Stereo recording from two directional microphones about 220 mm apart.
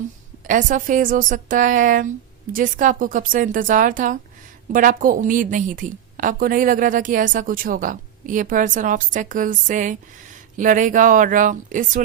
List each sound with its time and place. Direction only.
0.4 s a woman's voice: 35° right (ahead or behind)